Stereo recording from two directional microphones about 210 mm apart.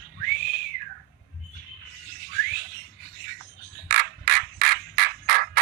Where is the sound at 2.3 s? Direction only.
45° right (ahead or behind).